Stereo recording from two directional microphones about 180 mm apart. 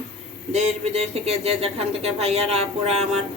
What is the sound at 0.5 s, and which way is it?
Speech, 35° right (ahead or behind).